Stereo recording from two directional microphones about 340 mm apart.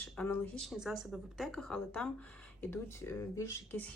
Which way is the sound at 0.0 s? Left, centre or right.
Centre.